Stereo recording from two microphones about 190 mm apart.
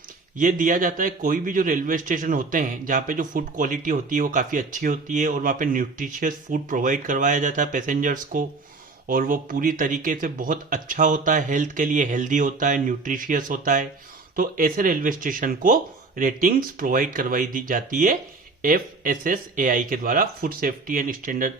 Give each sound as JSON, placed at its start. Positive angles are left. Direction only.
{"t": 0.3, "sound": "a man's voice", "side_deg": -45}